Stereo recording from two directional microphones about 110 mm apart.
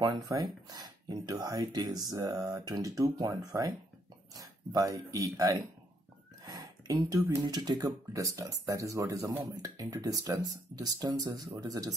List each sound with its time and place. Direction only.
0.0 s speech: 35° right (ahead or behind)